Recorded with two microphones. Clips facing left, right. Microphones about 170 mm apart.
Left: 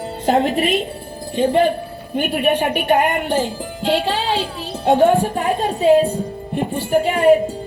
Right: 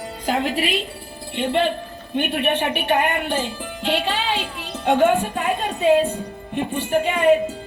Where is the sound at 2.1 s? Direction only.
40° left (ahead or behind).